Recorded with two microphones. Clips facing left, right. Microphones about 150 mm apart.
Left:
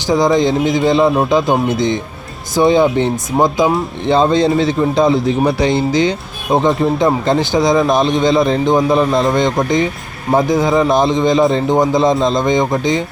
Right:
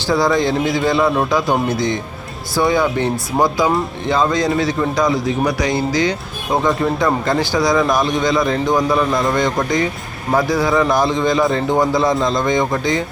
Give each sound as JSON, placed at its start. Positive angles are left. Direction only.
{"t": 0.1, "sound": "speech", "side_deg": 20}